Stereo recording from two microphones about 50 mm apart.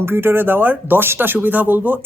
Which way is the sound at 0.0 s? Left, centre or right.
Right.